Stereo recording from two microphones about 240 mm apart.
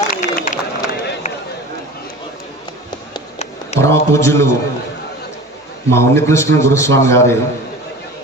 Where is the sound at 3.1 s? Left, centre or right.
Left.